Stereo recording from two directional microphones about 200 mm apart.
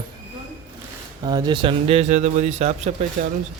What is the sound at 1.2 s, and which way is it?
Speech, 20° right (ahead or behind).